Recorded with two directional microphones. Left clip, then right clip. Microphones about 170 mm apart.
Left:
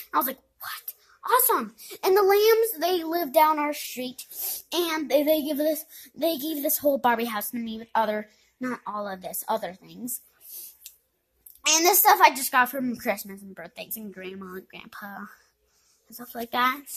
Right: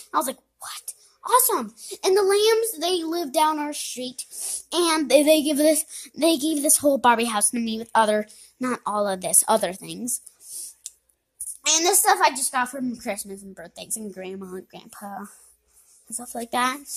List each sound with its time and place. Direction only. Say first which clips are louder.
0.0 s speech: right 1 dB; centre (ahead or behind)
4.4 s a child's voice: right 2 dB; 25° left (ahead or behind)
4.8 s a woman's voice: right 6 dB; 35° right (ahead or behind); by 9.9 s 55° right (ahead or behind)
11.6 s a woman's voice: left 1 dB; 15° left (ahead or behind); by 13.1 s 30° left (ahead or behind)
13.1 s a woman's voice: left 1 dB; 15° left (ahead or behind)
13.6 s speech: even; 5° right (ahead or behind)